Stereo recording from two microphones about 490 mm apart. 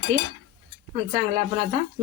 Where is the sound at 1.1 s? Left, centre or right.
Centre.